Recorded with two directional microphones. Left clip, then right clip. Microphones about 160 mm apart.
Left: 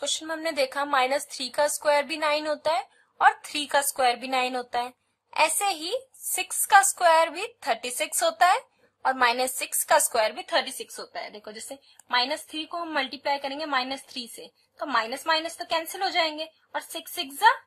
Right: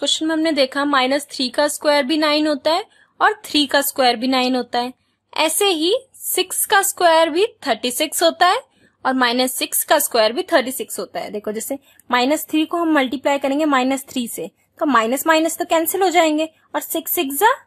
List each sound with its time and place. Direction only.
0.0 s a woman's voice: 20° right (ahead or behind)
11.1 s a woman's voice: 65° right (ahead or behind)
15.7 s a woman's voice: 75° right (ahead or behind)